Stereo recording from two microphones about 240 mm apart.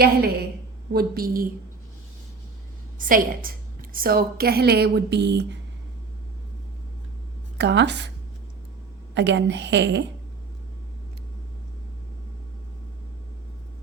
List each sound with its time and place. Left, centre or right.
0.0 s a woman's voice: right
3.1 s a woman's voice: right
7.6 s a woman's voice: right
9.1 s a woman's voice: right